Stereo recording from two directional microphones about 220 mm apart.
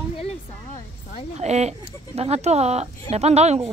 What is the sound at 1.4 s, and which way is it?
Speech, 30° right (ahead or behind).